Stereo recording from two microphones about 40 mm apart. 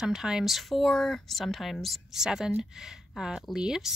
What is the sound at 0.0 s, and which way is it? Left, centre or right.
Speech, centre.